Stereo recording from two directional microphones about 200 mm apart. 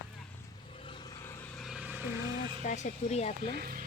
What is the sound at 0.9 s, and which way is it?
Vehicle, 20° left (ahead or behind).